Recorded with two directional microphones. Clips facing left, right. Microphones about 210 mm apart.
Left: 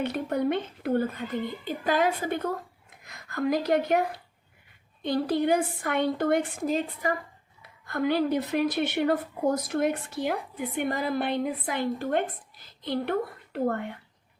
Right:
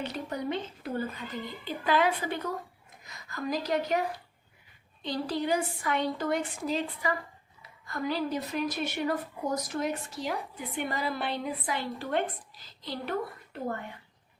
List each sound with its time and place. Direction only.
0.0 s a woman's voice: 55° left (ahead or behind)
3.0 s speech: 60° left (ahead or behind)
5.0 s a woman's voice: 60° left (ahead or behind)
7.6 s a woman's voice: 60° left (ahead or behind)